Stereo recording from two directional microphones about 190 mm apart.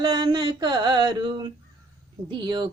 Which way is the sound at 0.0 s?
25° right (ahead or behind).